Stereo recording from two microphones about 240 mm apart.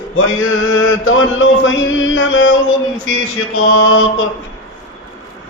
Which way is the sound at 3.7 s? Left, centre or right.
Left.